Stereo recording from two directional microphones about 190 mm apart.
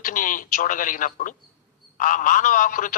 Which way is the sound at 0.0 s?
45° left (ahead or behind).